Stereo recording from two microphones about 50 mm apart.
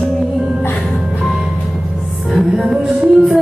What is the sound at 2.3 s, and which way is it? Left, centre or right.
Music, centre.